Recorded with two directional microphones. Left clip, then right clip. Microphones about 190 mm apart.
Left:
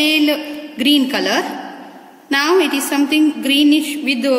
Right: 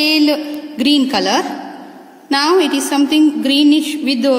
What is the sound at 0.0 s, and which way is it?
A woman's voice, 50° right (ahead or behind).